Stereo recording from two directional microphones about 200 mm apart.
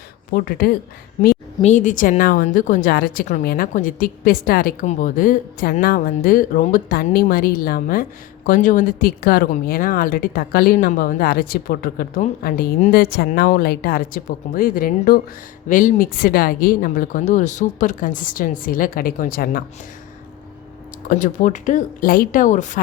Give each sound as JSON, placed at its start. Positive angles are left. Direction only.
{"t": 0.3, "sound": "speech", "side_deg": 50}
{"t": 1.6, "sound": "speech", "side_deg": 40}
{"t": 21.1, "sound": "speech", "side_deg": 40}